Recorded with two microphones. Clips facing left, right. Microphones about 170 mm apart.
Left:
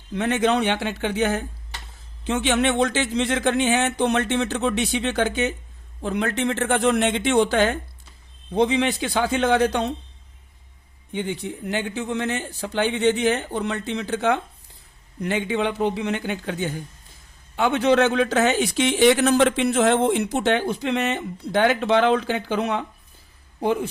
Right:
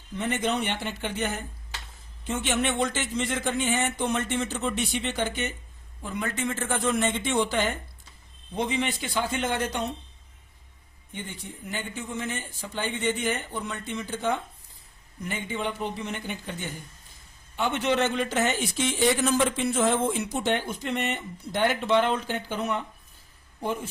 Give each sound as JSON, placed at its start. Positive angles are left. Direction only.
{"t": 0.1, "sound": "a man's voice", "side_deg": 80}
{"t": 6.0, "sound": "speech", "side_deg": 70}
{"t": 11.1, "sound": "a man's voice", "side_deg": 85}